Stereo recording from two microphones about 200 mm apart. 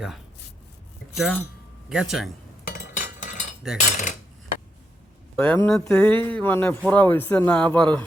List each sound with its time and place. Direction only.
1.1 s speech: centre (ahead or behind)
2.9 s chink: 40° left (ahead or behind)
3.6 s cutlery: centre (ahead or behind)
5.4 s speech: 10° left (ahead or behind)